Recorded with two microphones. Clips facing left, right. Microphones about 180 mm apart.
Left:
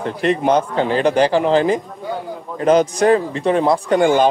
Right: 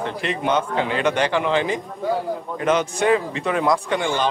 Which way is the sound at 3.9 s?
45° left (ahead or behind).